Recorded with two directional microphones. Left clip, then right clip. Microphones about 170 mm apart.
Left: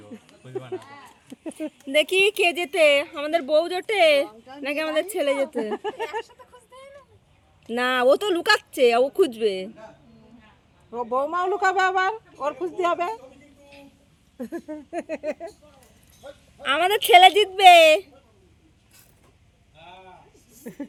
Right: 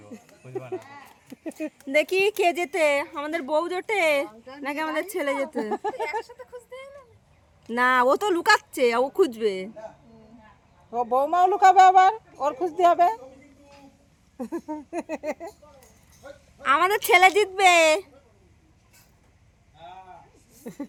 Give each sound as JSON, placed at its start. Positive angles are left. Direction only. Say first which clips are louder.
{"t": 0.1, "sound": "a sound", "louder": "left 1 dB", "side_deg": 5}
{"t": 1.8, "sound": "speech", "louder": "left 2 dB", "side_deg": -15}
{"t": 7.7, "sound": "speech", "louder": "even", "side_deg": -15}
{"t": 11.1, "sound": "speech", "louder": "right 3 dB", "side_deg": -15}
{"t": 14.3, "sound": "speech", "louder": "right 1 dB", "side_deg": -5}
{"t": 16.6, "sound": "speech", "louder": "even", "side_deg": -15}
{"t": 20.6, "sound": "a sound", "louder": "even", "side_deg": 0}